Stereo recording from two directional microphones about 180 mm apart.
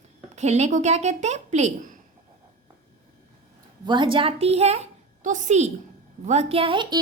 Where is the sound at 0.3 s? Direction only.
40° right (ahead or behind).